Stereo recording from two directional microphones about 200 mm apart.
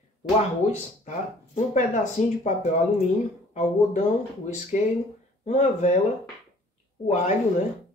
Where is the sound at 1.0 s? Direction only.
35° left (ahead or behind).